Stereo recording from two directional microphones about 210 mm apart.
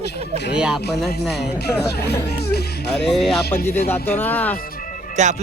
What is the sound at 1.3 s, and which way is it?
Speech, 50° left (ahead or behind).